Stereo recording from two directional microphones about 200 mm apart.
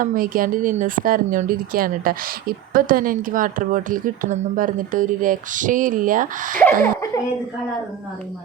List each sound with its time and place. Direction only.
0.0 s speech: 45° right (ahead or behind)